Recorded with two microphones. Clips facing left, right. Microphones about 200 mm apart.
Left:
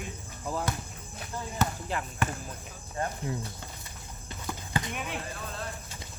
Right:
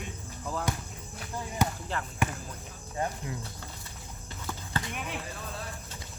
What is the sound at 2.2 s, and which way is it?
Speech, 15° right (ahead or behind).